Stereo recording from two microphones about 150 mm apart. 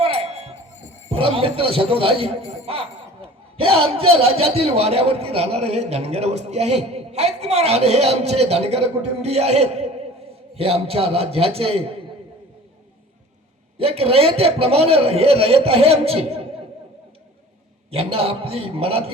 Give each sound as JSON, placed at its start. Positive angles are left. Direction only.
{"t": 0.0, "sound": "a sound", "side_deg": -45}
{"t": 1.1, "sound": "a man's voice", "side_deg": -40}
{"t": 13.7, "sound": "a man's voice", "side_deg": -40}
{"t": 17.9, "sound": "a man's voice", "side_deg": -40}